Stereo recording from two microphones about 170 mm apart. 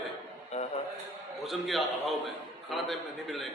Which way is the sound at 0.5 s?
40° left (ahead or behind).